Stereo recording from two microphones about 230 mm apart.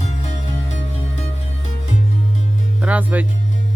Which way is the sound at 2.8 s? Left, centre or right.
Centre.